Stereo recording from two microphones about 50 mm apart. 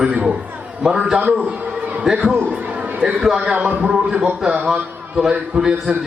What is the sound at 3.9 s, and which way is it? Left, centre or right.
A man's voice, centre.